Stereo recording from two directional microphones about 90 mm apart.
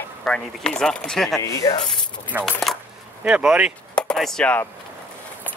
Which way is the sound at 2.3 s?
25° right (ahead or behind).